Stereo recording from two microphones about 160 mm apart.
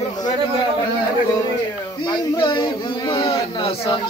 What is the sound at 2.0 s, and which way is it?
A man's voice, 25° left (ahead or behind).